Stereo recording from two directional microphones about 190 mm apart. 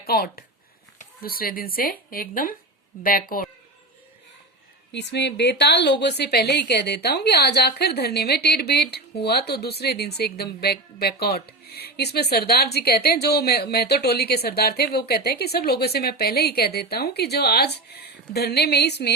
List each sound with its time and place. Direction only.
0.0 s a woman's voice: 55° left (ahead or behind)
4.9 s a woman's voice: 65° left (ahead or behind)